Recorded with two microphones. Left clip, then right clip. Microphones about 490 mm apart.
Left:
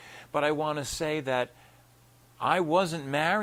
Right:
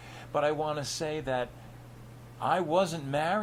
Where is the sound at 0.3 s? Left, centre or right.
Left.